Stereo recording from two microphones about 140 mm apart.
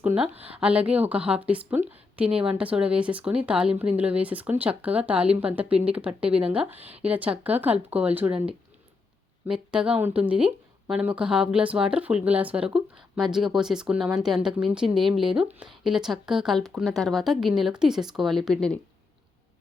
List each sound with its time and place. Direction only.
0.0 s a woman's voice: 10° right (ahead or behind)
6.7 s speech: 45° right (ahead or behind)
7.1 s a woman's voice: 10° right (ahead or behind)